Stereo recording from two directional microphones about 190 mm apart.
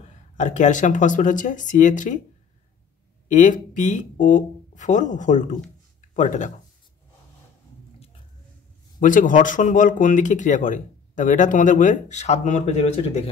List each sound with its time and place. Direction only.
0.1 s speech: 40° left (ahead or behind)
3.3 s speech: 40° left (ahead or behind)
9.0 s speech: 45° left (ahead or behind)